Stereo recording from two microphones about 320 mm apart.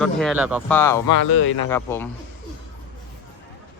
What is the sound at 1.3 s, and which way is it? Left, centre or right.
Speech, left.